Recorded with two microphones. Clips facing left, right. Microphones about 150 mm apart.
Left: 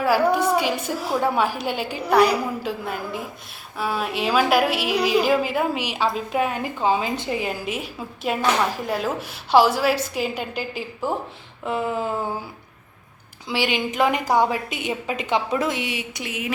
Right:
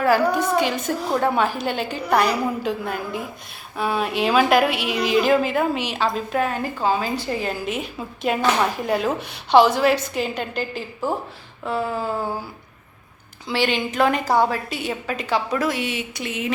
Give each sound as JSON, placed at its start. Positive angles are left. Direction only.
{"t": 0.0, "sound": "a woman's voice", "side_deg": 10}
{"t": 13.5, "sound": "a woman's voice", "side_deg": 10}